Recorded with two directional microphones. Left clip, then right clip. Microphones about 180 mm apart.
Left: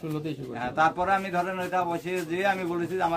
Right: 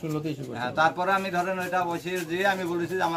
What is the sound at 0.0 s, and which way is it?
Speech, 50° right (ahead or behind).